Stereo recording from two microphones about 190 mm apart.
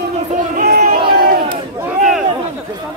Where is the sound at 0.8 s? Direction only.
50° right (ahead or behind).